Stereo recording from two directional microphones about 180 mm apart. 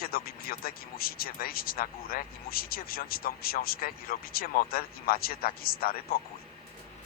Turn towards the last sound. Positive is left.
turn(degrees=55)  # may be behind; listen again after turning